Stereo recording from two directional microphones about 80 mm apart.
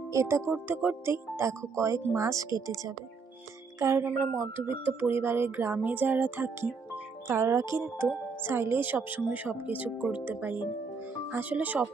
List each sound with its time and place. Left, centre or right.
0.1 s speech: right
0.5 s speech: right
3.8 s speech: right